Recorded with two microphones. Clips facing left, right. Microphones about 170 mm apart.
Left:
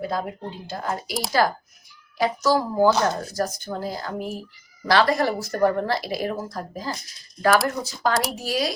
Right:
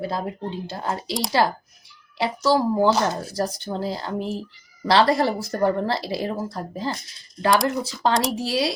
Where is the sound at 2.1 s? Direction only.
30° right (ahead or behind).